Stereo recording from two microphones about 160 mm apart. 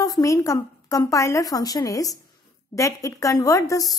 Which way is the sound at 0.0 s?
20° left (ahead or behind).